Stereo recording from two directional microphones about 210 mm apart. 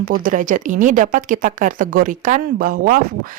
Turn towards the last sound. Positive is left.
turn(degrees=-40)  # may be behind; listen again after turning